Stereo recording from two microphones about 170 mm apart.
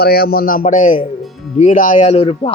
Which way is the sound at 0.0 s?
65° left (ahead or behind).